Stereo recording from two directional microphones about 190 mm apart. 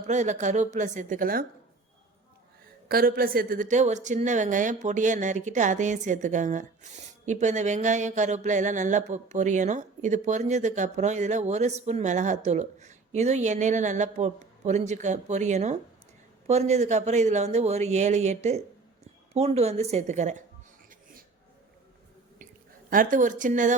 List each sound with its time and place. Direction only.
0.1 s a woman's voice: 40° right (ahead or behind)
2.9 s a woman's voice: 50° right (ahead or behind)
22.9 s speech: 45° right (ahead or behind)